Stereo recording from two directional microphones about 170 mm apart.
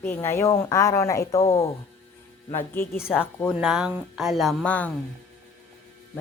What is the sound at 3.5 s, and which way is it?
Speech, 5° right (ahead or behind).